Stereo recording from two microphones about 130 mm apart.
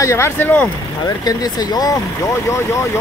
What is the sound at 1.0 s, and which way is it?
Speech, 30° left (ahead or behind).